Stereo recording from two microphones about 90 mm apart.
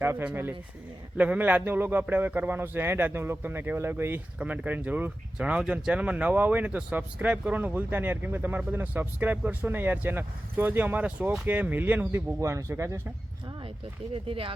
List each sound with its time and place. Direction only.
0.0 s a man's voice: 25° right (ahead or behind)
12.4 s speech: 35° right (ahead or behind)
14.1 s speech: 85° right